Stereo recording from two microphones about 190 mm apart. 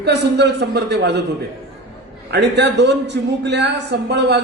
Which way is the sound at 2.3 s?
65° right (ahead or behind).